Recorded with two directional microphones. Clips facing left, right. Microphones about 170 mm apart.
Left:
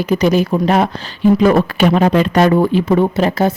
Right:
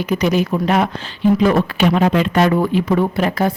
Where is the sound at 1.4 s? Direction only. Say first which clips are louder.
Left 3 dB; 45° left (ahead or behind); by 3.5 s 25° left (ahead or behind).